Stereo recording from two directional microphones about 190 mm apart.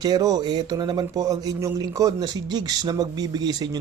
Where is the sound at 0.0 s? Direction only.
20° right (ahead or behind).